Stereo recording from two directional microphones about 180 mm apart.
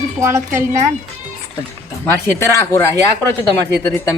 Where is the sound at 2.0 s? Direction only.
10° left (ahead or behind).